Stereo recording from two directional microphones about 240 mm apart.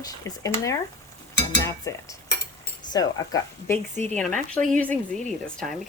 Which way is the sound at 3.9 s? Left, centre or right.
Right.